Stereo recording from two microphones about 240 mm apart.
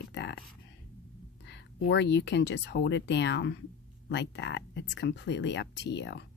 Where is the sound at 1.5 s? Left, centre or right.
Left.